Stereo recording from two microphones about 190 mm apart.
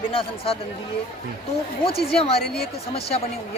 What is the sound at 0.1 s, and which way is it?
Speech, 30° left (ahead or behind).